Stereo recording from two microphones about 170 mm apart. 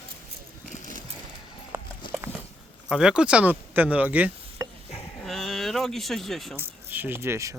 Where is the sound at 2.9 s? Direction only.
5° right (ahead or behind).